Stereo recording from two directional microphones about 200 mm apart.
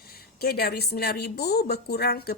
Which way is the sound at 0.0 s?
50° left (ahead or behind).